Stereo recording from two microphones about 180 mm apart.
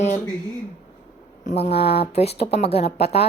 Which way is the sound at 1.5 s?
40° left (ahead or behind).